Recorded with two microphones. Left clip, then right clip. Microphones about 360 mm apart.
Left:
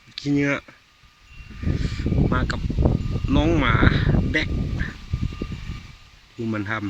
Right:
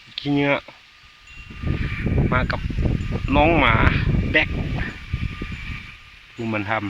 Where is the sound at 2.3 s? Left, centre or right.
Centre.